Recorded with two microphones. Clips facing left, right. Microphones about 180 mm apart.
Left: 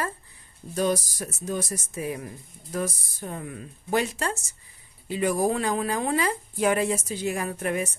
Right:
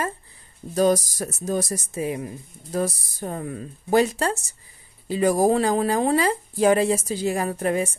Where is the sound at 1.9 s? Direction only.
20° right (ahead or behind).